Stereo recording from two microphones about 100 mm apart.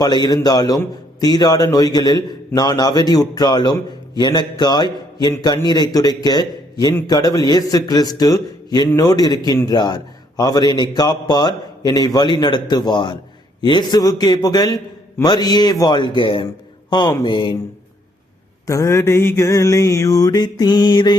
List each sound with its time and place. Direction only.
0.0 s a man's voice: 45° left (ahead or behind)
16.9 s a man's voice: 45° left (ahead or behind)
18.6 s a man's voice: 30° left (ahead or behind); by 21.2 s 50° left (ahead or behind)